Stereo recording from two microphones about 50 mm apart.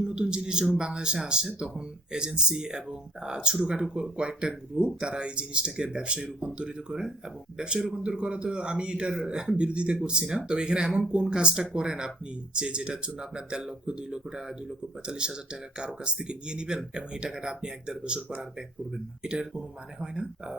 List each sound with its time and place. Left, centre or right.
0.0 s a man's voice: centre